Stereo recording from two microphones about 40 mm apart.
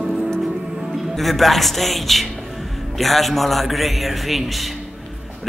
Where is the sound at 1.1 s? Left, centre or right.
Centre.